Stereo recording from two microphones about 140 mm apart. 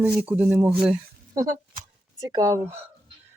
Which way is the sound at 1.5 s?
70° right (ahead or behind).